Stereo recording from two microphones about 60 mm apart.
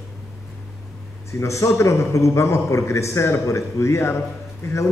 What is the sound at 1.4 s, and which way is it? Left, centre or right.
A man's voice, left.